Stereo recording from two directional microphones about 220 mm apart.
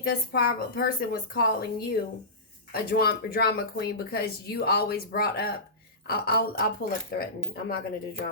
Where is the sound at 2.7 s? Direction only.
45° left (ahead or behind).